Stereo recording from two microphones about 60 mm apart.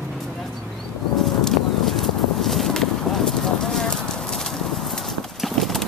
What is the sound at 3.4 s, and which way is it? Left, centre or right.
Clip-clop, centre.